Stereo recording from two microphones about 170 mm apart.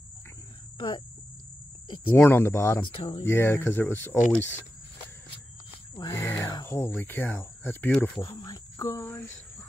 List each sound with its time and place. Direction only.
0.7 s cricket: 25° left (ahead or behind)
2.0 s speech: 10° left (ahead or behind)
2.8 s speech: 35° left (ahead or behind)
3.3 s speech: 15° left (ahead or behind)
5.9 s speech: 15° left (ahead or behind)
8.2 s speech: 20° left (ahead or behind)